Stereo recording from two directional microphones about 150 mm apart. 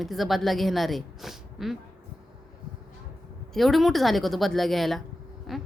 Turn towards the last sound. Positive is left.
turn(degrees=0)  # may be behind; listen again after turning